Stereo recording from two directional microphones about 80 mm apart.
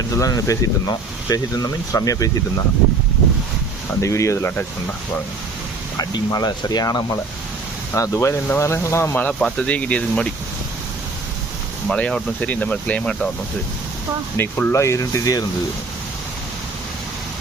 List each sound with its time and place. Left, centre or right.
0.1 s speech: left
4.0 s speech: left
6.0 s speech: left
7.9 s speech: left
9.4 s speech: centre
11.9 s speech: centre
14.3 s speech: left